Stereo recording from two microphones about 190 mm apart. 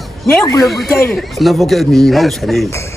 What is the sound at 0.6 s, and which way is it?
A man's voice, centre (ahead or behind).